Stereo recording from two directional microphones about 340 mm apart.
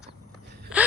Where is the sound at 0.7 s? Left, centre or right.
Centre.